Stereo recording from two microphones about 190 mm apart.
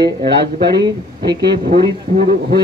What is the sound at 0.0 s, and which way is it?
Speech, 25° right (ahead or behind).